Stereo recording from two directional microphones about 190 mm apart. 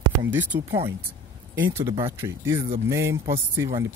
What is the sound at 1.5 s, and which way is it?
Speech, 10° right (ahead or behind).